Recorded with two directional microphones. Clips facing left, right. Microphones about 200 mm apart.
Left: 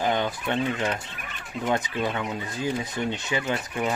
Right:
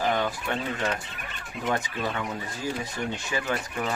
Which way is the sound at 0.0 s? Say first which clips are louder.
Left 1 dB; 20° left (ahead or behind).